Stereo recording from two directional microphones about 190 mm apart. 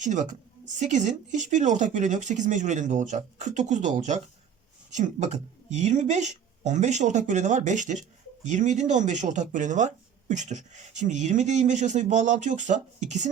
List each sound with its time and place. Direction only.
0.0 s speech: 40° right (ahead or behind)